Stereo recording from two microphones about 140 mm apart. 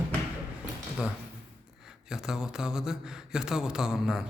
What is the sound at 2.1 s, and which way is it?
Speech, 5° right (ahead or behind).